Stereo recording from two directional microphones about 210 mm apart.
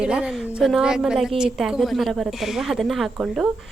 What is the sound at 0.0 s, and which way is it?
A woman's voice, 5° right (ahead or behind).